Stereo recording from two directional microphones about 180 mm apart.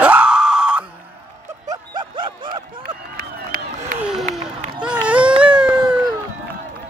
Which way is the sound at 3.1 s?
55° right (ahead or behind).